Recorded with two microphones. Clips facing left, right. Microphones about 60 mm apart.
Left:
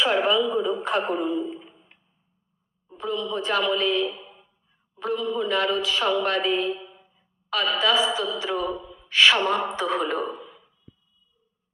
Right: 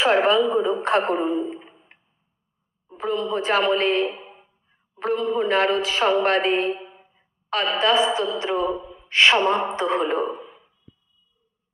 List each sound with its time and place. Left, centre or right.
0.0 s speech: right
3.0 s a man's voice: right
4.2 s a sound: right
4.9 s a man's voice: right
6.7 s a sound: right
7.7 s speech: right